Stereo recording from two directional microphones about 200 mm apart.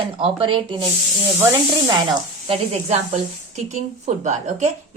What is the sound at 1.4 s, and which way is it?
Speech, 10° right (ahead or behind).